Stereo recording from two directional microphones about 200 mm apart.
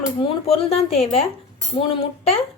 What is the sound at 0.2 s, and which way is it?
Speech, 30° left (ahead or behind).